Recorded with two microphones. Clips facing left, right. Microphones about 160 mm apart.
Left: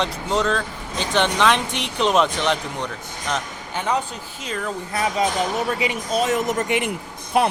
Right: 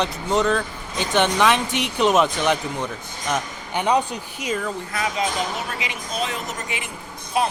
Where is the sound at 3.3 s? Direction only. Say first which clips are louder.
Right 3 dB; 15° right (ahead or behind).